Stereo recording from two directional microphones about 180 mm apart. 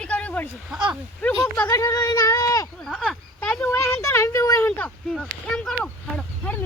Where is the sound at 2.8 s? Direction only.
5° left (ahead or behind).